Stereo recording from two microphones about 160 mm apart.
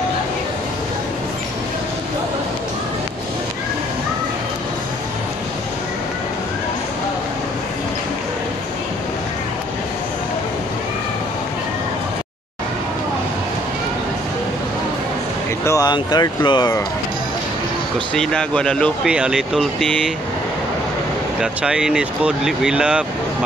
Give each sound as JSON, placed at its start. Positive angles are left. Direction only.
{"t": 15.6, "sound": "speech", "side_deg": 20}
{"t": 18.1, "sound": "speech", "side_deg": 5}
{"t": 19.0, "sound": "speech", "side_deg": -5}
{"t": 21.4, "sound": "speech", "side_deg": -5}